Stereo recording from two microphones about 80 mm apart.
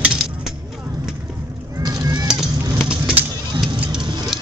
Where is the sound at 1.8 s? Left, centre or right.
Right.